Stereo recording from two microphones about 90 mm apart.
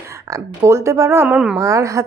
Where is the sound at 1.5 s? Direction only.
35° right (ahead or behind).